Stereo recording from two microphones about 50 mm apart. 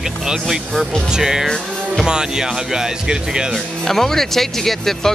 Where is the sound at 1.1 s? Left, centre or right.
Centre.